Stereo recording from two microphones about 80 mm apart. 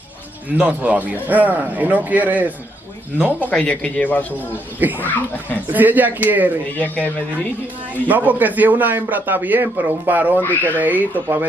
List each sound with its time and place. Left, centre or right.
0.6 s a man's voice: centre
3.3 s speech: centre
4.7 s a man's voice: right
5.0 s speech: left
5.7 s a man's voice: right
8.1 s a man's voice: right
10.4 s speech: left
10.7 s a man's voice: right